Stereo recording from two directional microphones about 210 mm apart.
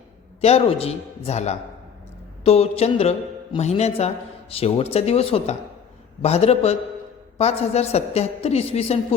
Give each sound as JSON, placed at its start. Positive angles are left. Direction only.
{"t": 0.4, "sound": "a woman's voice", "side_deg": 30}